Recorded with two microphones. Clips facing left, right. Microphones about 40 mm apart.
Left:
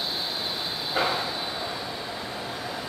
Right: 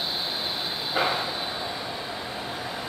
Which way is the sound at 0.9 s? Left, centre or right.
Centre.